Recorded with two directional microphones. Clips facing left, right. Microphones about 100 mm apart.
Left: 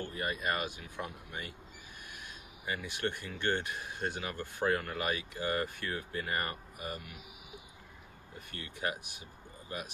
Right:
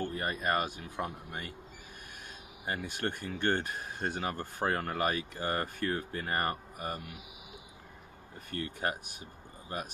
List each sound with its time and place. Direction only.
0.0 s speech: 40° right (ahead or behind)
2.6 s speech: 45° right (ahead or behind)
8.5 s speech: 40° right (ahead or behind)